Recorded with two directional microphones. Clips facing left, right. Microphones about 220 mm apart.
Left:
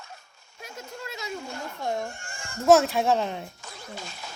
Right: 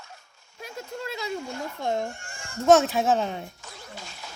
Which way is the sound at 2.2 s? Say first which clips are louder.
Left 1 dB; 50° left (ahead or behind).